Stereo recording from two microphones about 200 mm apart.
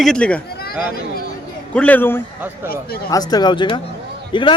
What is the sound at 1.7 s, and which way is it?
A man's voice, 10° left (ahead or behind).